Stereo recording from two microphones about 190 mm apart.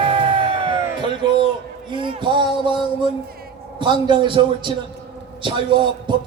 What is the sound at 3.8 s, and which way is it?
A man's voice, 25° right (ahead or behind).